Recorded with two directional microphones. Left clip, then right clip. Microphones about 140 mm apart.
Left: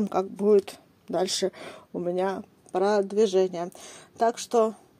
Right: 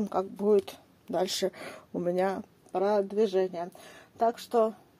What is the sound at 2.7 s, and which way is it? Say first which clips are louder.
Speech: left 3 dB; 30° left (ahead or behind).